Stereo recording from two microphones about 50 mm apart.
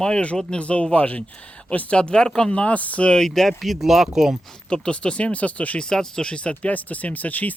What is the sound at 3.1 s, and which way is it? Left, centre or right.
Speech, centre.